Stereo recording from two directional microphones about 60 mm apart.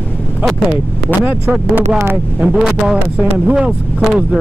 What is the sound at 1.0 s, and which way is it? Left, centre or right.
Speech, right.